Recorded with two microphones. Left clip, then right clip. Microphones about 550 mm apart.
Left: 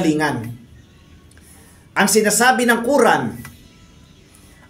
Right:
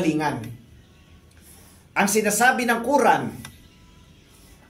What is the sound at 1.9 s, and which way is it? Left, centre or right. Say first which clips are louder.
Speech: left 5 dB; right.